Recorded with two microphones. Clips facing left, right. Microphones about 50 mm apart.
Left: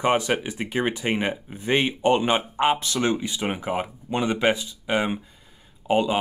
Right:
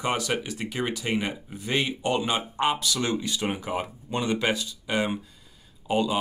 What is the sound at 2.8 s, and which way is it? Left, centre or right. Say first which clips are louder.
Speech: left 3 dB; left.